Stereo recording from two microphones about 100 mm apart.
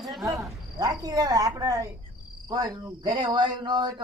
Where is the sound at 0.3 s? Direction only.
35° right (ahead or behind).